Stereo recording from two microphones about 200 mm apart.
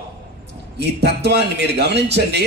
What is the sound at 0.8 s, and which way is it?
A man's voice, 55° right (ahead or behind).